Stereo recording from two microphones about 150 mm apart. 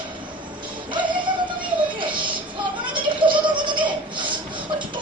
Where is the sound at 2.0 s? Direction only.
30° right (ahead or behind).